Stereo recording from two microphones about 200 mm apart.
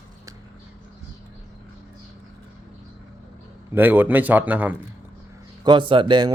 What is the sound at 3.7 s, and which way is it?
Speech, 10° right (ahead or behind).